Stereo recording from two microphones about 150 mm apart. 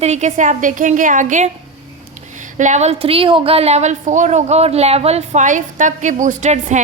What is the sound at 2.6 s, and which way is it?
A woman's voice, 50° right (ahead or behind).